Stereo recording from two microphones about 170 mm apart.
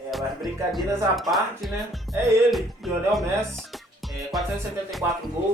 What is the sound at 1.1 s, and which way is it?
Music, centre (ahead or behind).